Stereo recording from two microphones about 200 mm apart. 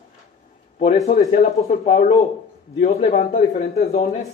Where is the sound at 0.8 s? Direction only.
35° left (ahead or behind).